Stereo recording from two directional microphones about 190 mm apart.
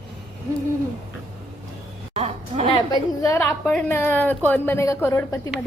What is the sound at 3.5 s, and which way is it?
A woman's voice, 10° left (ahead or behind).